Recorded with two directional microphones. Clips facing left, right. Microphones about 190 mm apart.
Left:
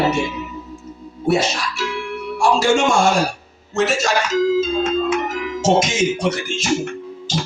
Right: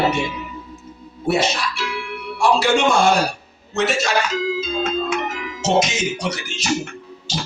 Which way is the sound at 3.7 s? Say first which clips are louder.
Left 1 dB; 45° left (ahead or behind).